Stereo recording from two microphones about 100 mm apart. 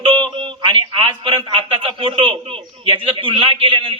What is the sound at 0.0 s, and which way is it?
A man's voice, 60° right (ahead or behind).